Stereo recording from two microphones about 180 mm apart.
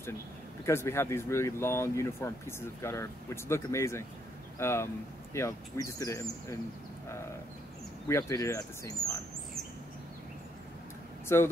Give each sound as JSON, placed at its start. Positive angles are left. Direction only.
{"t": 0.7, "sound": "speech", "side_deg": 15}
{"t": 8.1, "sound": "speech", "side_deg": 15}
{"t": 11.3, "sound": "speech", "side_deg": 15}